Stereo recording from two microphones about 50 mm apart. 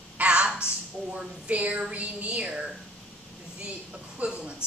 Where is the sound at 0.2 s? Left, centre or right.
Right.